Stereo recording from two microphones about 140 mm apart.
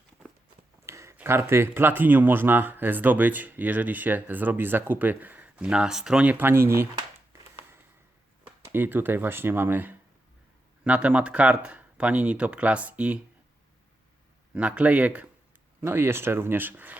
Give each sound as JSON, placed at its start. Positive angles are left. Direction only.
{"t": 0.9, "sound": "speech", "side_deg": -20}
{"t": 8.7, "sound": "speech", "side_deg": -15}
{"t": 14.5, "sound": "speech", "side_deg": -10}